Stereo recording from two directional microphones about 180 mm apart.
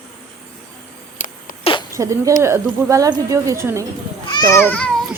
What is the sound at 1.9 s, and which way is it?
Speech, 15° right (ahead or behind).